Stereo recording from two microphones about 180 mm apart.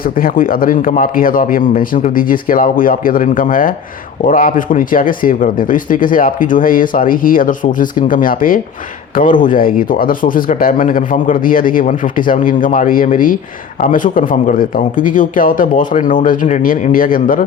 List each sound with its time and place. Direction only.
0.0 s speech: 50° left (ahead or behind)